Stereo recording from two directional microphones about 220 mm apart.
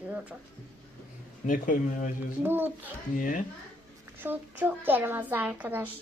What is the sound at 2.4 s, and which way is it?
Speech, 10° right (ahead or behind).